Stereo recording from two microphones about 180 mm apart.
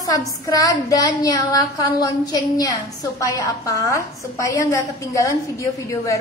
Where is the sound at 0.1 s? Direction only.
20° left (ahead or behind).